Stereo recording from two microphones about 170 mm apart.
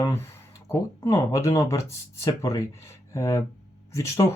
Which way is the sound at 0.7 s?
20° left (ahead or behind).